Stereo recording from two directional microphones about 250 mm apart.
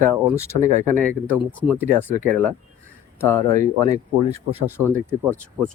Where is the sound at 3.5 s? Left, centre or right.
Right.